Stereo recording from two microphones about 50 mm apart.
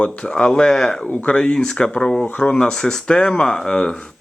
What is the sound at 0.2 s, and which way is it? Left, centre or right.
Speech, left.